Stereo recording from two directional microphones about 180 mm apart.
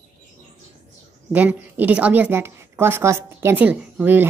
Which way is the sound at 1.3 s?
10° right (ahead or behind).